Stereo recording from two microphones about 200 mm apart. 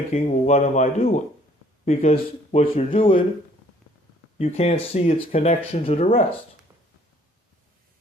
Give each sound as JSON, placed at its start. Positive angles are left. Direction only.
{"t": 0.1, "sound": "speech", "side_deg": 35}
{"t": 4.4, "sound": "speech", "side_deg": 30}